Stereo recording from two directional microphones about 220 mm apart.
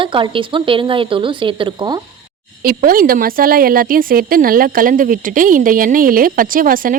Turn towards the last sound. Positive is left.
turn(degrees=-40)  # may be behind; listen again after turning